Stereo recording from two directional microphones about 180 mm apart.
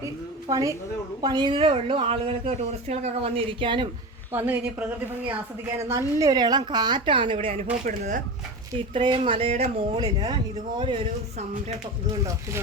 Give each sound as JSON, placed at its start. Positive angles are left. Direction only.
{"t": 0.0, "sound": "a woman's voice", "side_deg": -20}
{"t": 4.3, "sound": "a woman's voice", "side_deg": -10}
{"t": 8.9, "sound": "a woman's voice", "side_deg": -30}
{"t": 10.0, "sound": "speech", "side_deg": -25}